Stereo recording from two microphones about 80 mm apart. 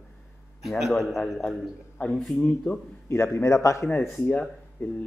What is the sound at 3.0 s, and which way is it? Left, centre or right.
Speech, left.